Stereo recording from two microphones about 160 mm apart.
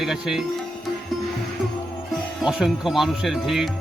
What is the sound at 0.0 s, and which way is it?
Speech, centre (ahead or behind).